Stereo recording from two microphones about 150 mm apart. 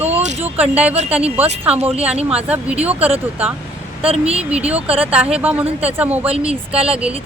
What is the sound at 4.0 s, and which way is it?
Speech, 40° right (ahead or behind).